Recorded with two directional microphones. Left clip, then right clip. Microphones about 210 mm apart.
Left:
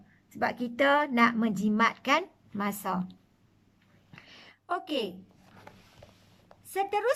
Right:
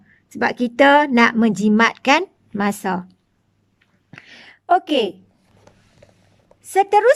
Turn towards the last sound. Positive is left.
turn(degrees=-45)  # may be behind; listen again after turning